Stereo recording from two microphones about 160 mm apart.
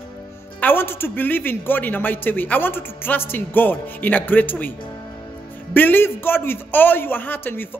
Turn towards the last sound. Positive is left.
turn(degrees=15)  # may be behind; listen again after turning